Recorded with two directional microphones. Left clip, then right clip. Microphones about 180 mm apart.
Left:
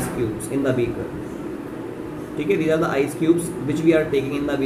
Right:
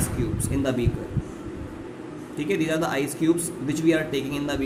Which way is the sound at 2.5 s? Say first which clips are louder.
Left 5 dB; 50° right (ahead or behind).